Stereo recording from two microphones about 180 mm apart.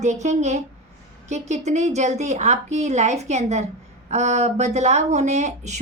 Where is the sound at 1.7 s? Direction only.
40° right (ahead or behind).